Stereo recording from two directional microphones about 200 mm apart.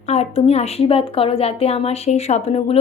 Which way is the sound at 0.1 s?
30° left (ahead or behind).